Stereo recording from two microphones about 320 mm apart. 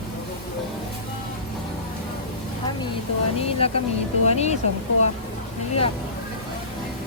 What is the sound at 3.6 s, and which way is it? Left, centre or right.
Speech, centre.